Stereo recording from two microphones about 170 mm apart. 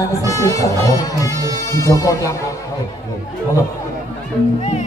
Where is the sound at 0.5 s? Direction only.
20° left (ahead or behind).